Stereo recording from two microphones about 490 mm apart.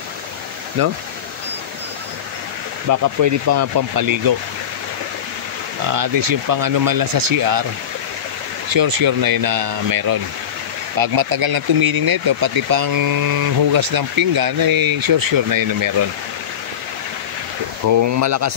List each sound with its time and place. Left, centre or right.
0.8 s speech: right
2.9 s speech: right
5.9 s speech: right
8.7 s speech: right
17.8 s speech: right